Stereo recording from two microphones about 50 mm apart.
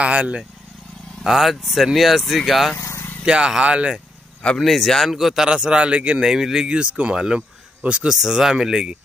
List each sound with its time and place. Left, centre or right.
0.0 s a man's voice: right
1.2 s speech: centre
2.8 s vehicle: left
3.3 s a man's voice: centre
4.6 s speech: centre
5.1 s speech: centre
5.5 s a man's voice: centre
6.2 s speech: centre
6.8 s speech: right
8.1 s speech: centre